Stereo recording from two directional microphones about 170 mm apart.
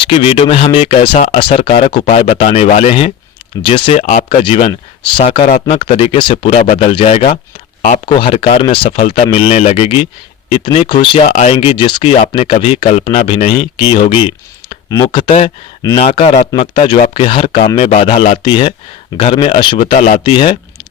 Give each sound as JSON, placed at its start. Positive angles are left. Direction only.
{"t": 0.0, "sound": "speech", "side_deg": 30}
{"t": 4.0, "sound": "speech", "side_deg": 45}
{"t": 4.4, "sound": "speech", "side_deg": 35}
{"t": 6.6, "sound": "speech", "side_deg": 45}
{"t": 6.8, "sound": "speech", "side_deg": 35}
{"t": 8.0, "sound": "speech", "side_deg": 30}
{"t": 11.3, "sound": "speech", "side_deg": 45}
{"t": 11.5, "sound": "speech", "side_deg": 30}
{"t": 19.9, "sound": "speech", "side_deg": 45}
{"t": 20.2, "sound": "speech", "side_deg": 30}